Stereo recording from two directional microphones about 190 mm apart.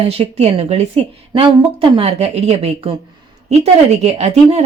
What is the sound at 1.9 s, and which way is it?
Speech, 30° right (ahead or behind).